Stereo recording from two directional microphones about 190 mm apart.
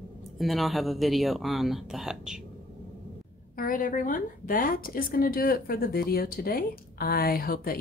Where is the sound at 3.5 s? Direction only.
45° left (ahead or behind).